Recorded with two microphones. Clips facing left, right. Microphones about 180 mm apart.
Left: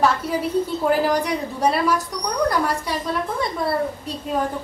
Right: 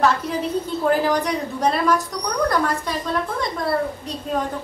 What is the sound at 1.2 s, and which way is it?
Speech, 10° left (ahead or behind).